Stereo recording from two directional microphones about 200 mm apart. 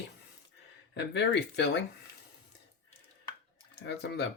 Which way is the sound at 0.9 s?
60° left (ahead or behind).